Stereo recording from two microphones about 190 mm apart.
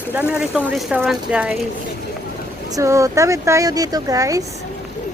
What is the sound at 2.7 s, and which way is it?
Speech, 15° right (ahead or behind).